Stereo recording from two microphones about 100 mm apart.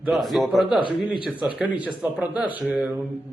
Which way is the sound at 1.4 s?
10° right (ahead or behind).